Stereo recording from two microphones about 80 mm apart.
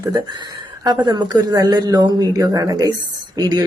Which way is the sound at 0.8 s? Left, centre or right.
Right.